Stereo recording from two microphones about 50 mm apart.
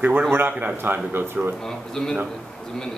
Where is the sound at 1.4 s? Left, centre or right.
Right.